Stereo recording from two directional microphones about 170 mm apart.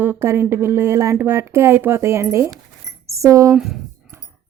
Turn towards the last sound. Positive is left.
turn(degrees=0)  # may be behind; listen again after turning